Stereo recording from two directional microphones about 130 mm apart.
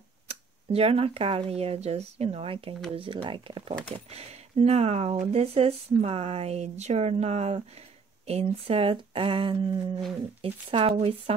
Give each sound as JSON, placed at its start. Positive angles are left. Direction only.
{"t": 0.3, "sound": "speech", "side_deg": -50}